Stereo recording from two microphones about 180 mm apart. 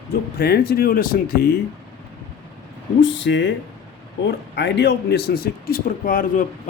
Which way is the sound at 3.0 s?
80° left.